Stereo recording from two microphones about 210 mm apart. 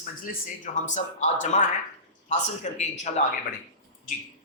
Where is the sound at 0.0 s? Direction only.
40° left (ahead or behind).